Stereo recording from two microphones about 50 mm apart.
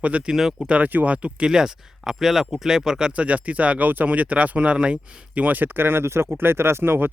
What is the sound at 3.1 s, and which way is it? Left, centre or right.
Speech, right.